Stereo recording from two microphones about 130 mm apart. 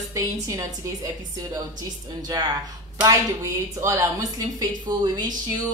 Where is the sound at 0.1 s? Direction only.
25° right (ahead or behind).